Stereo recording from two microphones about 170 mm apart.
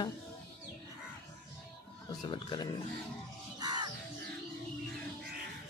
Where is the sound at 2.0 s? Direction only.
25° left (ahead or behind).